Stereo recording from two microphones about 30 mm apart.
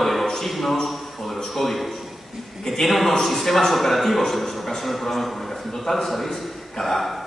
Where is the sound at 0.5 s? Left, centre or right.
Centre.